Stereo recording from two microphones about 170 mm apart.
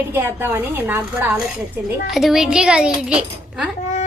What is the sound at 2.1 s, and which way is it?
A woman's voice, centre (ahead or behind).